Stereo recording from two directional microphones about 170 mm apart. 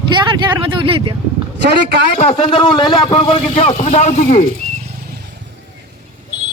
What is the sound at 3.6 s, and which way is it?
Speech, 35° left (ahead or behind).